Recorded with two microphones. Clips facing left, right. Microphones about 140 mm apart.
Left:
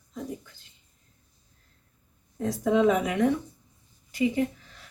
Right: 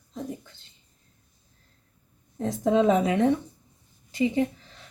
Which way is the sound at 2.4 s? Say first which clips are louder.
Even; 25° right (ahead or behind).